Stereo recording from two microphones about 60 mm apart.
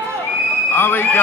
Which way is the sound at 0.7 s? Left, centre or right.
Left.